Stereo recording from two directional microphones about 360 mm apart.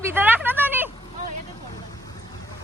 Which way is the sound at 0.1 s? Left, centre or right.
Centre.